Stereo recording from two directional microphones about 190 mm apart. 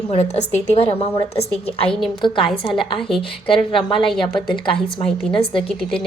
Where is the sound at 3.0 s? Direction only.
Centre (ahead or behind).